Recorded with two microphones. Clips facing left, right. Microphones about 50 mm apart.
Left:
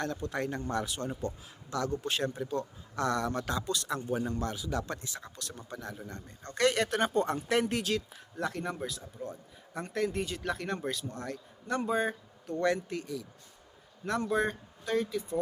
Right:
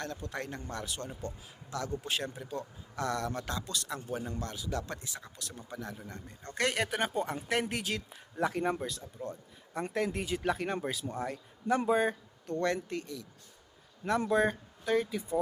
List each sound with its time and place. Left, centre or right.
0.0 s a man's voice: centre
8.4 s speech: centre
9.0 s speech: centre
11.9 s a man's voice: centre
12.5 s a man's voice: centre
14.3 s speech: centre